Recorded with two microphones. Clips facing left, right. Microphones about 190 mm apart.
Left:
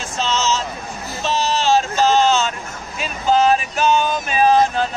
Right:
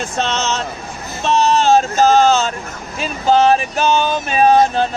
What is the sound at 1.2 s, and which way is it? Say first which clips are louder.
Vehicle: right 5 dB; 55° right (ahead or behind).